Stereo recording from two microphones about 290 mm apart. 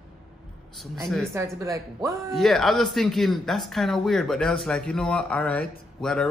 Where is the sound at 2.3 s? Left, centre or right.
Centre.